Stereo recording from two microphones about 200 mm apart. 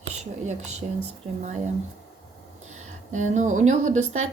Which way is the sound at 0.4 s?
35° right (ahead or behind).